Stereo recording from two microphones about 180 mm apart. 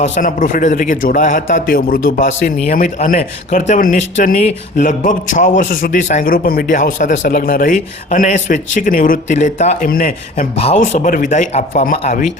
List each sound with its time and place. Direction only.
0.0 s speech: 45° left (ahead or behind)
10.3 s speech: 35° left (ahead or behind)